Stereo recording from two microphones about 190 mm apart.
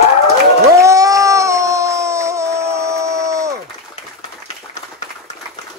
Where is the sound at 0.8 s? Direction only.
15° right (ahead or behind).